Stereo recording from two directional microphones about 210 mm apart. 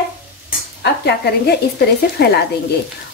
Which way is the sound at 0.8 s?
55° left (ahead or behind).